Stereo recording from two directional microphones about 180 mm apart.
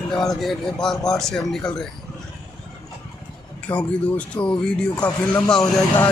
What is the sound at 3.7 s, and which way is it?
Speech, 10° left (ahead or behind).